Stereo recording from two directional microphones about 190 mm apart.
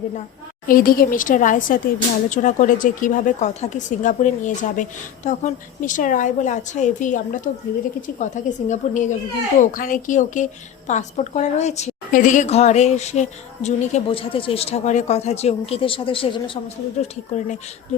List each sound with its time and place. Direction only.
0.7 s a woman's voice: 50° left (ahead or behind); by 16.4 s 30° left (ahead or behind)
17.0 s a woman's voice: 40° left (ahead or behind)